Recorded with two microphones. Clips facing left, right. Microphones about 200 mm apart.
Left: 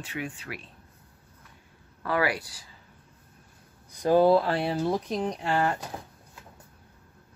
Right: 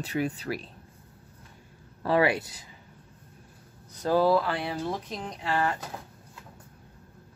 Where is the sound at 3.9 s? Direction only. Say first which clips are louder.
Left 3 dB; 15° left (ahead or behind); by 5.7 s 35° left (ahead or behind).